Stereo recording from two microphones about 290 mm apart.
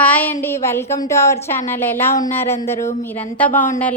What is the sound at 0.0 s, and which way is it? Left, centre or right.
A woman's voice, centre.